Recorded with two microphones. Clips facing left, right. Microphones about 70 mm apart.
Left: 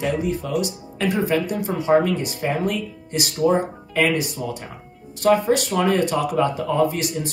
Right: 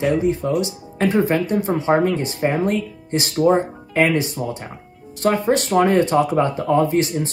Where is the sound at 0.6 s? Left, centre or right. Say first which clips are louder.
Right 3 dB; right.